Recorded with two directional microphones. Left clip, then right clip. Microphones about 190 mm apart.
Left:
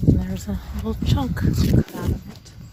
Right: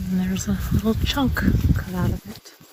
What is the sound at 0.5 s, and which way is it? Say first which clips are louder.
Speech: right 4 dB; 15° left (ahead or behind).